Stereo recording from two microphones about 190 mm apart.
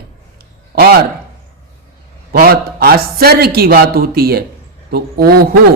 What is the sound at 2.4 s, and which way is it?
A man's voice, 50° right (ahead or behind).